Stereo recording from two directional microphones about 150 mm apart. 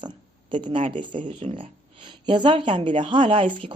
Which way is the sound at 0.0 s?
30° right (ahead or behind).